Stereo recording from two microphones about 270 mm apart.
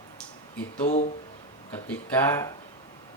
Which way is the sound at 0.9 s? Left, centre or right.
Left.